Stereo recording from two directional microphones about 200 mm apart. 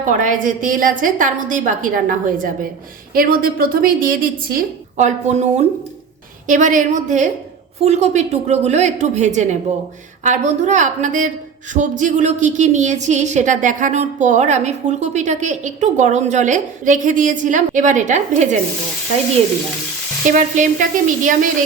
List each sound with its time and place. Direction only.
0.0 s a woman's voice: 40° right (ahead or behind)
20.3 s a woman's voice: 40° right (ahead or behind)